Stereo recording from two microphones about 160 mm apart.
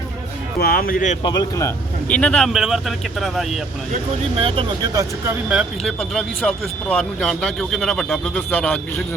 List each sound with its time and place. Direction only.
0.6 s speech: 70° left (ahead or behind); by 1.2 s 55° left (ahead or behind)
1.2 s a man's voice: 25° left (ahead or behind)
2.2 s speech: 5° left (ahead or behind)
4.4 s speech: 35° right (ahead or behind)
4.9 s speech: 15° right (ahead or behind); by 8.8 s 10° left (ahead or behind)